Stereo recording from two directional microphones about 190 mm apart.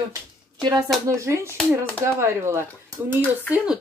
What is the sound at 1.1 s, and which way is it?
Speech, 15° right (ahead or behind).